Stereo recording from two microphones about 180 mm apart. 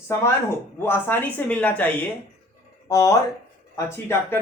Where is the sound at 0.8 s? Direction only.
10° left (ahead or behind).